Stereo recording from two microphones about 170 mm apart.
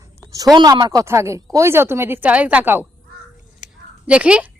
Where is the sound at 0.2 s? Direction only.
20° right (ahead or behind).